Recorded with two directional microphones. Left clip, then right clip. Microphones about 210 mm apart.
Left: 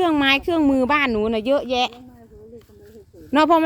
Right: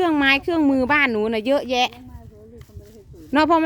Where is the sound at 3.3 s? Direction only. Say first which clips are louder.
Left 1 dB; centre (ahead or behind).